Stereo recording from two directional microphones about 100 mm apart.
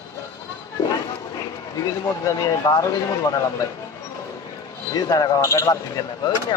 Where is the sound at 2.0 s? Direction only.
35° left (ahead or behind).